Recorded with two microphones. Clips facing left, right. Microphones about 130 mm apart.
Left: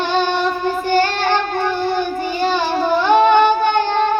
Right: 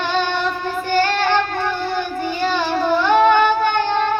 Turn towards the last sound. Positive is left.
turn(degrees=15)  # may be behind; listen again after turning